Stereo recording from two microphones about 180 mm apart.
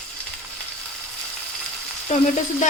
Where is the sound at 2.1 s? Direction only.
40° left (ahead or behind).